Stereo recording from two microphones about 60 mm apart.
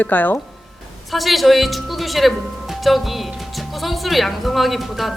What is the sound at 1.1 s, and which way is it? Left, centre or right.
Speech, centre.